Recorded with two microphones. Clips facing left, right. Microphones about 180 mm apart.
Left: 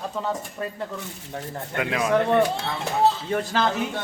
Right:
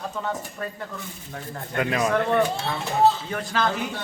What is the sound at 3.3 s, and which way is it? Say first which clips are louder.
Speech: left 3 dB; 30° left (ahead or behind).